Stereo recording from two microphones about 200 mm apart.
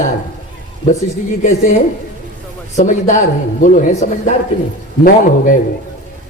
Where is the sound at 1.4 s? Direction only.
35° left (ahead or behind).